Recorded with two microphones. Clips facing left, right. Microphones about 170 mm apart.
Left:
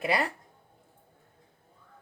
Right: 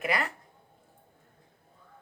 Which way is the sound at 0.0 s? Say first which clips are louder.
Left 2 dB; 30° left (ahead or behind).